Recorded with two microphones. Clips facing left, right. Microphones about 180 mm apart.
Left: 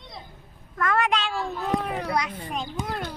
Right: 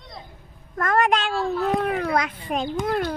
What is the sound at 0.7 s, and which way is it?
A child's voice, 45° right (ahead or behind).